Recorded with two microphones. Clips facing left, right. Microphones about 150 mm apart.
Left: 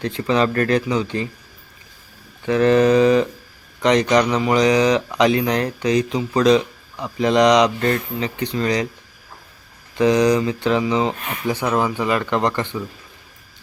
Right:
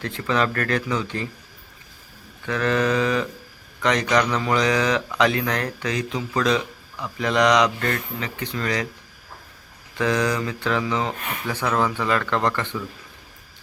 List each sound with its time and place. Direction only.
0.0 s speech: 20° left (ahead or behind)
2.5 s speech: 25° left (ahead or behind)
10.0 s speech: 20° left (ahead or behind)